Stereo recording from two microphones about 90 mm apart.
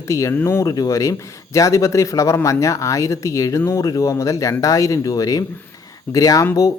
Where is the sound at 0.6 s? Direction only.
40° left (ahead or behind).